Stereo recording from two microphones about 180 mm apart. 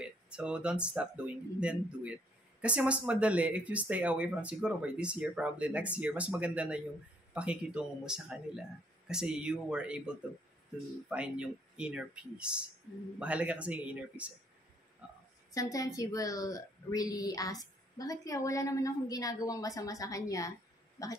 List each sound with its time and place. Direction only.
0.0 s speech: 5° right (ahead or behind)
15.5 s a woman's voice: 20° left (ahead or behind)